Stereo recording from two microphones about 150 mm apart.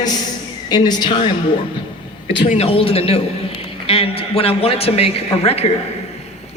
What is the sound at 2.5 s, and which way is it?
A man's voice, 40° left (ahead or behind).